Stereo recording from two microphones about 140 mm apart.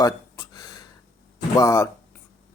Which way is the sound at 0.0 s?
25° left (ahead or behind).